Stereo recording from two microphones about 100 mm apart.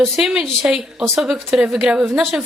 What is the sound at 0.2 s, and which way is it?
A man's voice, 5° right (ahead or behind).